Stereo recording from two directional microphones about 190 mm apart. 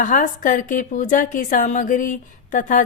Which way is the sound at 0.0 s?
40° left (ahead or behind).